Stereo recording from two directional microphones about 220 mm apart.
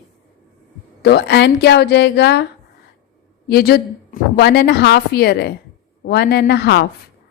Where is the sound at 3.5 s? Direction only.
45° left (ahead or behind).